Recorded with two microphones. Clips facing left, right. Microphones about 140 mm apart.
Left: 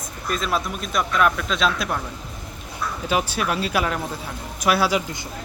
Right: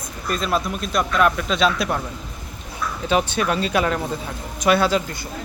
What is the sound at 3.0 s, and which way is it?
Speech, 5° left (ahead or behind).